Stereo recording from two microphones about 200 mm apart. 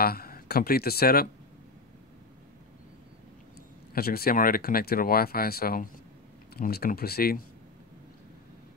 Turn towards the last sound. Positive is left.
turn(degrees=50)  # may be behind; listen again after turning